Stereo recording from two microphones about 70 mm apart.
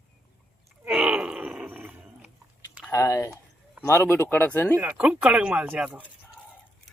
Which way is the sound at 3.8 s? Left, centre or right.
Left.